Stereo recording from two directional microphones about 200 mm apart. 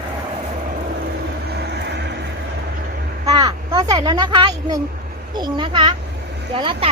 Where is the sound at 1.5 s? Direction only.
55° right (ahead or behind).